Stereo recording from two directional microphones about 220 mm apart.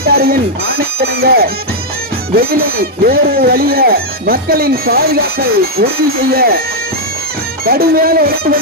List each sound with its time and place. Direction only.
0.0 s speech: 45° right (ahead or behind)
7.6 s speech: 45° right (ahead or behind)